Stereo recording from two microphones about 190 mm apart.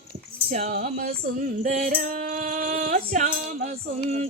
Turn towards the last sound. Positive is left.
turn(degrees=-45)  # may be behind; listen again after turning